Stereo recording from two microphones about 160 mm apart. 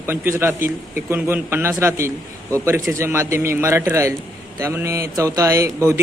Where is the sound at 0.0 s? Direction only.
15° right (ahead or behind).